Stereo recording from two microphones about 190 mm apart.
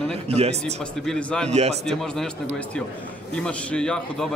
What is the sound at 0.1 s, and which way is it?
Speech, 35° right (ahead or behind).